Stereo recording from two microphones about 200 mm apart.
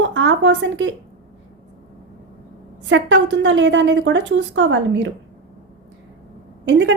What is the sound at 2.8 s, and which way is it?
A woman's voice, 70° right (ahead or behind).